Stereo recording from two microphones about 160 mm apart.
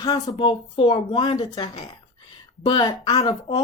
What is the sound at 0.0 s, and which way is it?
Speech, 25° left (ahead or behind).